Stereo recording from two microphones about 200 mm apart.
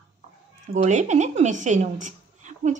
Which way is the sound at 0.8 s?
35° right (ahead or behind).